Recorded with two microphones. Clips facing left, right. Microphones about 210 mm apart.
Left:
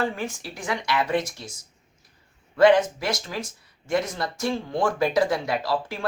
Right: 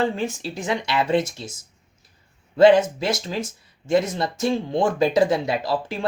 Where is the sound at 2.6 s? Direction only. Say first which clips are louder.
Right 3 dB; 25° right (ahead or behind).